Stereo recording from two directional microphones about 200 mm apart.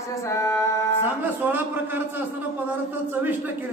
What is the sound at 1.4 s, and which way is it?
Speech, 10° right (ahead or behind).